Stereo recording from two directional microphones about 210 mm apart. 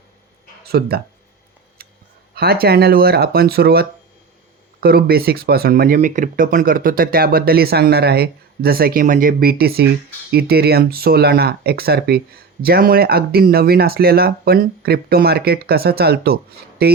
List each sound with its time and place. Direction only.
0.6 s speech: 50° right (ahead or behind)
2.3 s speech: 45° right (ahead or behind)